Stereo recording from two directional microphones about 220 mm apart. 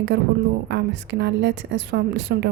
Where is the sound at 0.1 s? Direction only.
50° right (ahead or behind).